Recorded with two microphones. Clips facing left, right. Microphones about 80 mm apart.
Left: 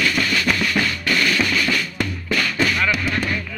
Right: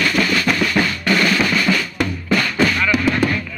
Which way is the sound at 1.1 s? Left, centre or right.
Right.